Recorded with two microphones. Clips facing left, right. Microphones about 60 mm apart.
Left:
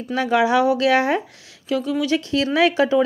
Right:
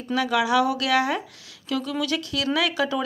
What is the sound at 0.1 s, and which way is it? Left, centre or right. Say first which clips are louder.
Speech: left 4 dB; left.